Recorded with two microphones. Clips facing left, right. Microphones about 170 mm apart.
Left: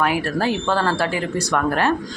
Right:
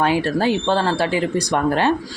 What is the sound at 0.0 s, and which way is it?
Speech, 25° right (ahead or behind).